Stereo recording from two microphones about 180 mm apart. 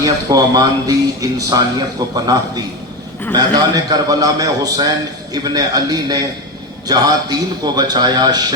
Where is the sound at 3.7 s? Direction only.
20° right (ahead or behind).